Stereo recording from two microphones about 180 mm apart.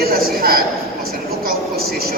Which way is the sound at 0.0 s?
55° right (ahead or behind).